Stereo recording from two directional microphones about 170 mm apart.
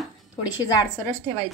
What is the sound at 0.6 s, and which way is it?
Speech, 20° left (ahead or behind).